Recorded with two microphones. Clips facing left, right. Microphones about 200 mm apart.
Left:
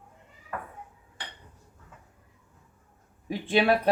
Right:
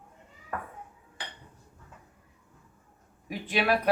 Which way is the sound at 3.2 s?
30° left (ahead or behind).